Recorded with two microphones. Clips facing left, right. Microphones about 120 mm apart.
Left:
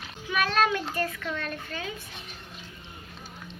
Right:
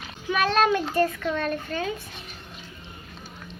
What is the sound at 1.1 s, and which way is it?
Speech, 35° right (ahead or behind).